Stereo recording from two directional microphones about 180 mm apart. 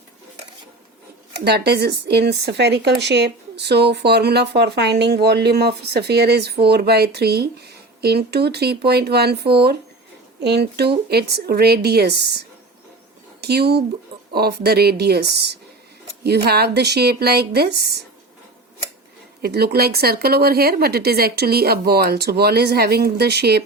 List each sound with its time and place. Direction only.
1.5 s speech: 65° right (ahead or behind)
13.4 s speech: 65° right (ahead or behind)
19.4 s speech: 60° right (ahead or behind)